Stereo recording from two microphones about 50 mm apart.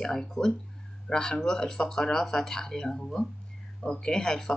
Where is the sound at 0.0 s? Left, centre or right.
Centre.